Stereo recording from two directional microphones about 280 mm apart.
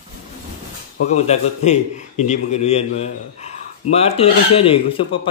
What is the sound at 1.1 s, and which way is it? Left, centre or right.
A man's voice, left.